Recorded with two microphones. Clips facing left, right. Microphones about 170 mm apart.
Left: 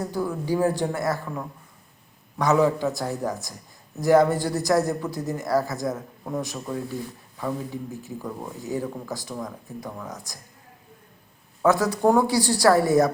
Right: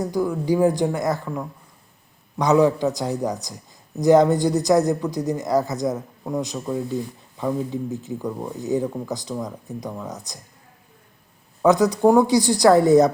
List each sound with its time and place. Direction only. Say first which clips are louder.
0.0 s a woman's voice: right 5 dB; 15° right (ahead or behind)
2.4 s a woman's voice: right 3 dB; 15° right (ahead or behind)
11.6 s a woman's voice: right 4 dB; 15° right (ahead or behind)